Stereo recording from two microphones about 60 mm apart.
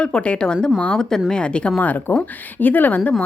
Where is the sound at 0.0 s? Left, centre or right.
Centre.